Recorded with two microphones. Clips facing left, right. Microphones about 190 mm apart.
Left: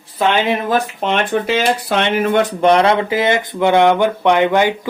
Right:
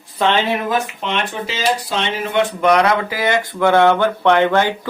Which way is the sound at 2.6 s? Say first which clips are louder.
Left 2 dB; 25° left (ahead or behind).